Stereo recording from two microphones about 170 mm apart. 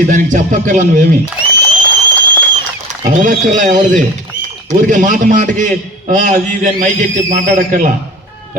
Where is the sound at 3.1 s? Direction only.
50° right (ahead or behind).